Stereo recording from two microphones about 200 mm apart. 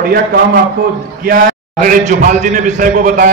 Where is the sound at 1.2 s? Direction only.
45° right (ahead or behind).